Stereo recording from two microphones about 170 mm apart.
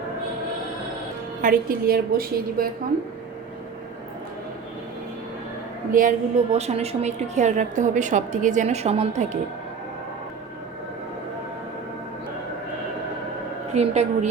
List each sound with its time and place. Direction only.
1.4 s a woman's voice: 55° right (ahead or behind)
5.9 s a woman's voice: 50° right (ahead or behind)
6.5 s a woman's voice: 40° right (ahead or behind)
13.7 s a woman's voice: 40° right (ahead or behind)